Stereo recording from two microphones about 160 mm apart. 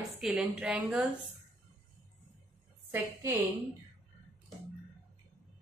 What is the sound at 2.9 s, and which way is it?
Speech, 15° right (ahead or behind).